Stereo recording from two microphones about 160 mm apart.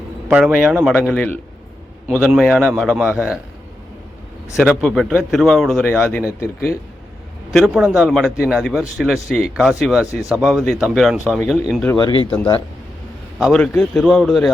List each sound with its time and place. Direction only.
0.3 s a man's voice: 5° right (ahead or behind)
4.5 s a man's voice: centre (ahead or behind)
6.4 s speech: 15° left (ahead or behind)
7.5 s a man's voice: 5° right (ahead or behind)
11.9 s speech: 25° left (ahead or behind)
13.4 s a man's voice: centre (ahead or behind)